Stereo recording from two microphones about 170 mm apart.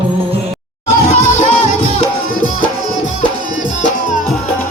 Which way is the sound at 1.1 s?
50° left (ahead or behind).